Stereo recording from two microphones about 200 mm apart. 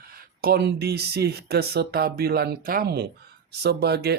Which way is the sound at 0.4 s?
50° right (ahead or behind).